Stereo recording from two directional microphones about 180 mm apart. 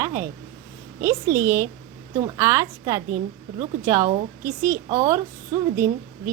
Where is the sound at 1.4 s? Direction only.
15° right (ahead or behind).